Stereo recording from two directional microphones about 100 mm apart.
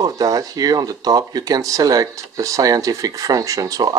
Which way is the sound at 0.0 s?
40° right (ahead or behind).